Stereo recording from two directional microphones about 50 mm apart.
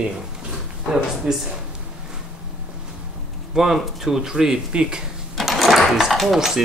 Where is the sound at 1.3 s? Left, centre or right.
Right.